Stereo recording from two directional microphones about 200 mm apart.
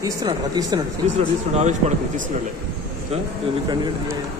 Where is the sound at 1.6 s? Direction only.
35° right (ahead or behind).